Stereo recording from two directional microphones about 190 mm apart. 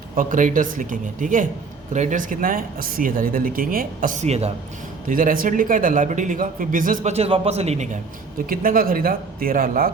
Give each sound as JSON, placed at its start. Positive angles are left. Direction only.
{"t": 0.2, "sound": "a man's voice", "side_deg": -45}
{"t": 5.0, "sound": "a man's voice", "side_deg": -45}
{"t": 8.4, "sound": "a man's voice", "side_deg": -50}